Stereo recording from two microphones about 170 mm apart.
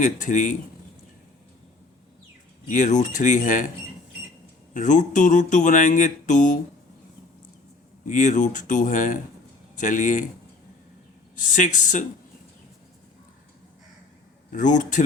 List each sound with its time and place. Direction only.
0.0 s speech: 45° left (ahead or behind)
2.6 s speech: 50° left (ahead or behind)
4.7 s speech: 45° left (ahead or behind)
8.0 s speech: 50° left (ahead or behind)
11.3 s speech: 50° left (ahead or behind)
14.5 s speech: 45° left (ahead or behind)